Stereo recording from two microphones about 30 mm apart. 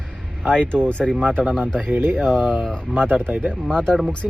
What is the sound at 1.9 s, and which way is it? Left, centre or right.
Speech, right.